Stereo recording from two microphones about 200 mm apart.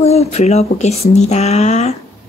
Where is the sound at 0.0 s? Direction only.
30° left (ahead or behind).